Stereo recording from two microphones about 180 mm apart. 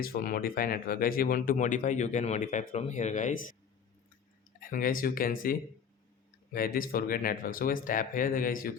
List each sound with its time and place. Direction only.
0.0 s speech: 55° left (ahead or behind)
4.6 s speech: 50° left (ahead or behind)